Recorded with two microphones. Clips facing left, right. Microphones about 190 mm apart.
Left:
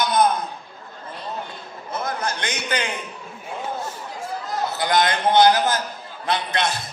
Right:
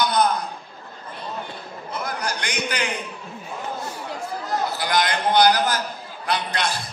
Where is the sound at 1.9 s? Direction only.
25° left (ahead or behind).